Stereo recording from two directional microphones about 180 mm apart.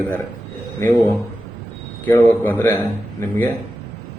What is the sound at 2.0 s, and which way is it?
Speech, 10° left (ahead or behind).